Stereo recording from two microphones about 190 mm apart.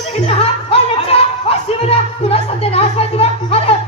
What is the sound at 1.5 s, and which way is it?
Music, 30° left (ahead or behind).